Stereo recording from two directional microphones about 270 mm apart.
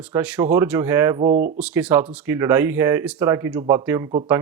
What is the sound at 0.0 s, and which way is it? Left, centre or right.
Speech, centre.